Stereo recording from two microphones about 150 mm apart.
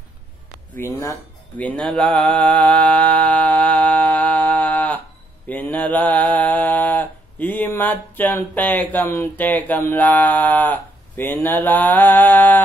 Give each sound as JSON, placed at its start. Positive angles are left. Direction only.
{"t": 0.7, "sound": "speech", "side_deg": 20}
{"t": 2.0, "sound": "mantra", "side_deg": 5}